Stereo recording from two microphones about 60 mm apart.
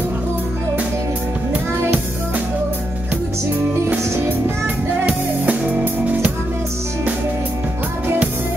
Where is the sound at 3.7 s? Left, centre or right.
Right.